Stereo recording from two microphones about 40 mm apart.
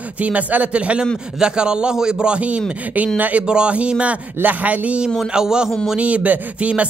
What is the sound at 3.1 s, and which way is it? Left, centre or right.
Speech, right.